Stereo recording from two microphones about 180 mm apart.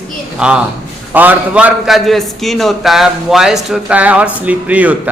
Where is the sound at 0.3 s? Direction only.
5° right (ahead or behind).